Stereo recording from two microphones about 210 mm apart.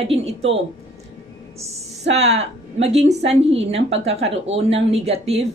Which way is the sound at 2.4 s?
30° right (ahead or behind).